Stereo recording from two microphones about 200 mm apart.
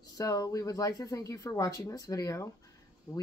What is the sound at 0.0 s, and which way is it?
Speech, 15° left (ahead or behind).